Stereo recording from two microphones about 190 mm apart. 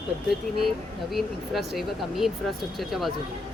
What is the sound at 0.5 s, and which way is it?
Speech, centre (ahead or behind).